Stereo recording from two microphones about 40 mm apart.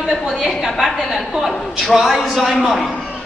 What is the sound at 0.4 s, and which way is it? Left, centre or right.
A woman's voice, centre.